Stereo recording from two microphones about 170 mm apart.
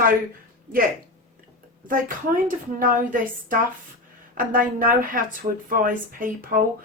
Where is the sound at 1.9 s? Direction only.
55° right (ahead or behind).